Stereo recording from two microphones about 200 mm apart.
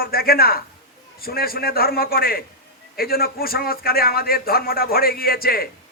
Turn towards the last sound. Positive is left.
turn(degrees=50)  # may be behind; listen again after turning